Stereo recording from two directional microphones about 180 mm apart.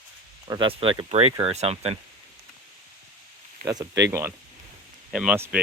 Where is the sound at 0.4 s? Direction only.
25° right (ahead or behind).